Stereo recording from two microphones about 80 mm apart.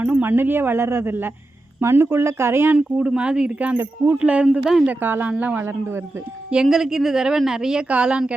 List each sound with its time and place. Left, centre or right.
0.0 s speech: right
2.7 s a woman's voice: centre
3.8 s speech: right
4.2 s a woman's voice: centre
6.5 s a woman's voice: centre